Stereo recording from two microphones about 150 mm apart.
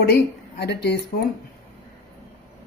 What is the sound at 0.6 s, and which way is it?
Speech, 90° left.